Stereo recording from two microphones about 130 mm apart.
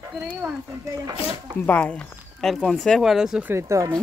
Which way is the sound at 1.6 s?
10° left (ahead or behind).